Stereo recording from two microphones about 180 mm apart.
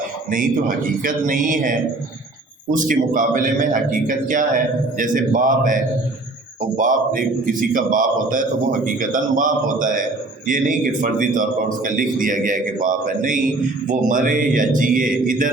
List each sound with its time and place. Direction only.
1.0 s a man's voice: 50° right (ahead or behind)